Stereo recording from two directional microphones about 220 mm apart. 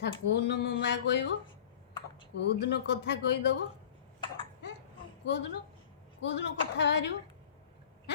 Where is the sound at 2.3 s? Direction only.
50° left (ahead or behind).